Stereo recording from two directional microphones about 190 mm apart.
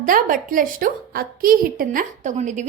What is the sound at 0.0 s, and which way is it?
A woman's voice, 45° right (ahead or behind).